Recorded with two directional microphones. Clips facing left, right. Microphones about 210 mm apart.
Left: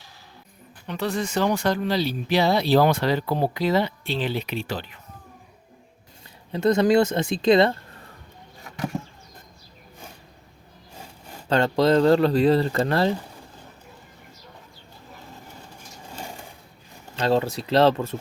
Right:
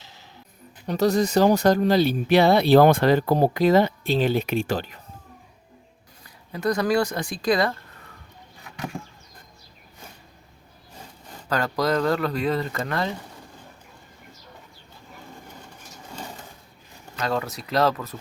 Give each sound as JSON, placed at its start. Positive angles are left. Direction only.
{"t": 0.9, "sound": "speech", "side_deg": -40}
{"t": 6.5, "sound": "speech", "side_deg": 25}
{"t": 11.4, "sound": "speech", "side_deg": 25}
{"t": 16.1, "sound": "sewing machine", "side_deg": 10}
{"t": 17.2, "sound": "speech", "side_deg": 30}